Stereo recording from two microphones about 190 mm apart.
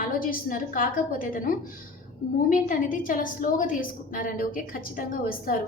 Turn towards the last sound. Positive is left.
turn(degrees=50)  # may be behind; listen again after turning